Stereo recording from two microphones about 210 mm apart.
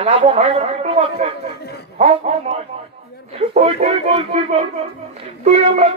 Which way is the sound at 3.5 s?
30° right (ahead or behind).